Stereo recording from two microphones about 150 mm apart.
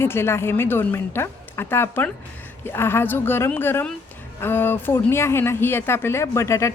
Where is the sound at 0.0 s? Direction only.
15° left (ahead or behind).